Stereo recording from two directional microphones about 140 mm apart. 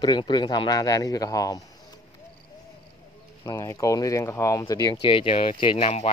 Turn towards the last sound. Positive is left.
turn(degrees=50)  # may be behind; listen again after turning